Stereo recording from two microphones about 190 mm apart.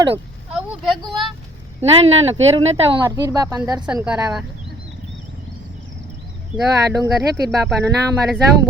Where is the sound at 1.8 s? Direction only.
35° right (ahead or behind).